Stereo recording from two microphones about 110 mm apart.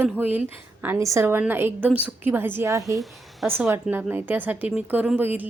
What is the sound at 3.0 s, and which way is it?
Speech, centre (ahead or behind).